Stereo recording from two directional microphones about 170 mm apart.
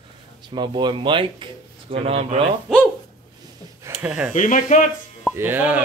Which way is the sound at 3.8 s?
15° right (ahead or behind).